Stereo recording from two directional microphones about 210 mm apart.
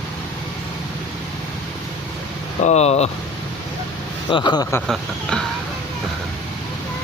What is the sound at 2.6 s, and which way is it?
Speech, 30° left (ahead or behind).